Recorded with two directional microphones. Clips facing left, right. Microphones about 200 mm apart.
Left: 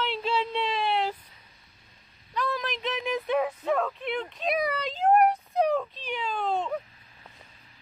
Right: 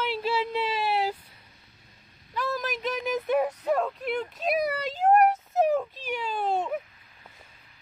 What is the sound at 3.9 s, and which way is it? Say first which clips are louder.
Speech: right 2 dB; 5° right (ahead or behind).